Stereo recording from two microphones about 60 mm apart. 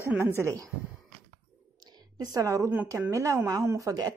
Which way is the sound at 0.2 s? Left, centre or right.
Right.